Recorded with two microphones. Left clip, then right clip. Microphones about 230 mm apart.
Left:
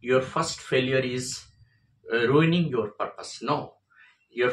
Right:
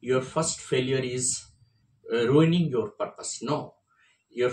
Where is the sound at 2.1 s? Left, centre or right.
Centre.